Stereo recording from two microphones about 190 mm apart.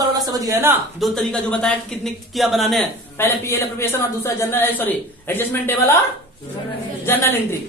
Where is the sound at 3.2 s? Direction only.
15° left (ahead or behind).